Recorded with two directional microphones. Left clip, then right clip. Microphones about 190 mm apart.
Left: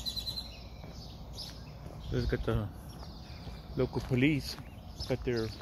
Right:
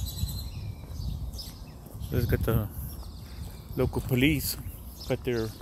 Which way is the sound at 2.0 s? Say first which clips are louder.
Right 4 dB; 40° right (ahead or behind).